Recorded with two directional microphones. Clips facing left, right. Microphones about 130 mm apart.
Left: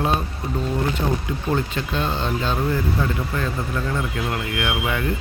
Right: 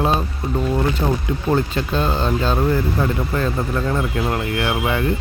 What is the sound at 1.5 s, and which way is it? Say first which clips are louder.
Speech: right 4 dB; 40° right (ahead or behind).